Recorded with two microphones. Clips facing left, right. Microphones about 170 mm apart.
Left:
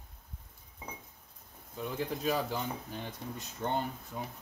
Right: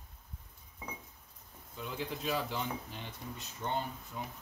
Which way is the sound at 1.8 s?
40° left (ahead or behind).